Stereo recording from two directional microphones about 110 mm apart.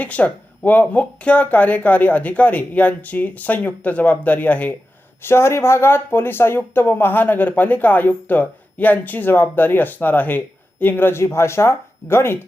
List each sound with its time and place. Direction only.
0.0 s speech: 15° left (ahead or behind)